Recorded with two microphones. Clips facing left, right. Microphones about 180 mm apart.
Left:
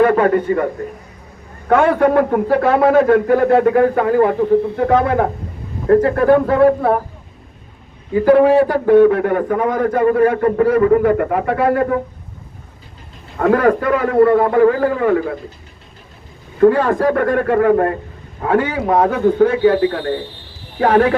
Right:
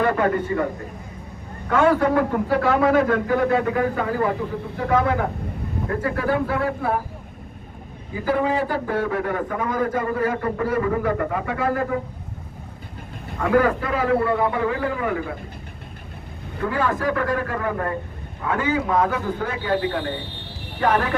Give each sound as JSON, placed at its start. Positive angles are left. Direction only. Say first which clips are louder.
{"t": 0.0, "sound": "a man's voice", "louder": "left 8 dB", "side_deg": 60}
{"t": 1.7, "sound": "a man's voice", "louder": "left 5 dB", "side_deg": 65}
{"t": 8.1, "sound": "a man's voice", "louder": "left 12 dB", "side_deg": 60}
{"t": 13.6, "sound": "a man's voice", "louder": "left 6 dB", "side_deg": 55}
{"t": 16.6, "sound": "a man's voice", "louder": "left 11 dB", "side_deg": 55}
{"t": 19.0, "sound": "a man's voice", "louder": "left 11 dB", "side_deg": 60}
{"t": 20.7, "sound": "speech", "louder": "left 8 dB", "side_deg": 65}